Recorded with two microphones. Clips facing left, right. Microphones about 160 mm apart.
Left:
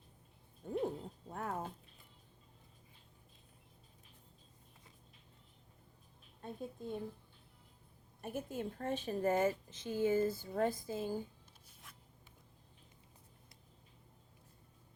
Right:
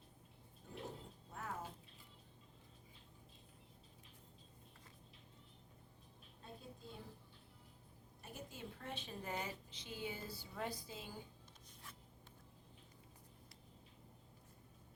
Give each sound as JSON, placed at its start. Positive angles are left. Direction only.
{"t": 0.6, "sound": "a sound", "side_deg": 55}
{"t": 6.4, "sound": "a woman's voice", "side_deg": 55}
{"t": 8.2, "sound": "a woman's voice", "side_deg": 50}